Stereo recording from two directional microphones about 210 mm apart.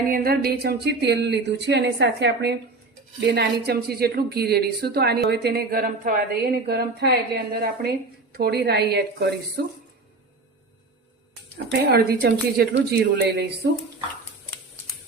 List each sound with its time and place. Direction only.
0.1 s speech: 45° right (ahead or behind)
11.7 s speech: 50° right (ahead or behind)